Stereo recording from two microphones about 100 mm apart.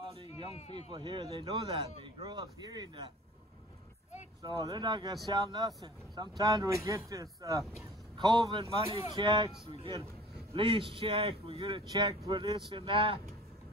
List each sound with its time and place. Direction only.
0.1 s a sound: 60° right (ahead or behind)
0.9 s speech: 50° right (ahead or behind)
4.4 s speech: 40° right (ahead or behind)
8.2 s speech: 50° right (ahead or behind)